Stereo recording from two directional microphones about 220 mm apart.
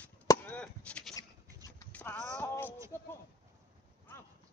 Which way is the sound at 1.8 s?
10° left (ahead or behind).